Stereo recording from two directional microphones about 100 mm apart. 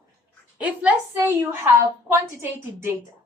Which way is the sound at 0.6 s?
15° right (ahead or behind).